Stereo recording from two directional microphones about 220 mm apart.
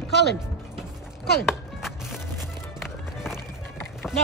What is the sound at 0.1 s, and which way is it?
Speech, 50° left (ahead or behind).